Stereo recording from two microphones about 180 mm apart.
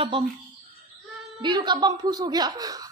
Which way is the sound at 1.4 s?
25° right (ahead or behind).